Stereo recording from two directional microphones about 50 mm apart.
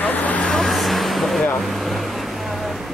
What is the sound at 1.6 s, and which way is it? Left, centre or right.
Vehicle, centre.